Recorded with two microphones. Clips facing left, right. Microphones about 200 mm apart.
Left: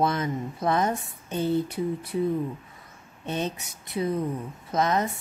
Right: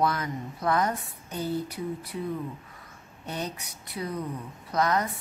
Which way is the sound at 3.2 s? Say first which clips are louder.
Left 5 dB; 25° left (ahead or behind).